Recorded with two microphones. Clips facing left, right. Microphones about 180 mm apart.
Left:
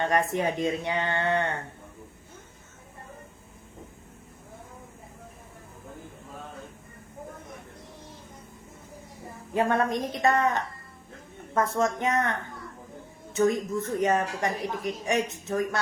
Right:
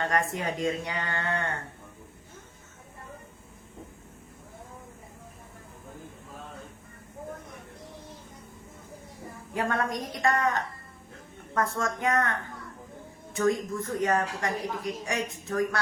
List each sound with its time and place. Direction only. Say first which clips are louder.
0.0 s speech: left 3 dB; 25° left (ahead or behind)
9.6 s speech: left 4 dB; 25° left (ahead or behind)
13.3 s speech: left 2 dB; 20° left (ahead or behind)